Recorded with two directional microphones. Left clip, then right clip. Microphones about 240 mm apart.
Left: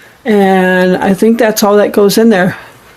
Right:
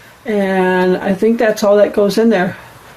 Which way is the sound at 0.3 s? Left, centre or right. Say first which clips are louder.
Left 6 dB; left.